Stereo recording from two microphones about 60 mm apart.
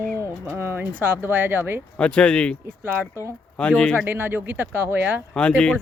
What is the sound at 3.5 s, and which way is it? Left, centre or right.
Speech, left.